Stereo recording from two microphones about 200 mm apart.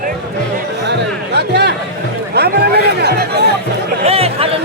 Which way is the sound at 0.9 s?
55° right (ahead or behind).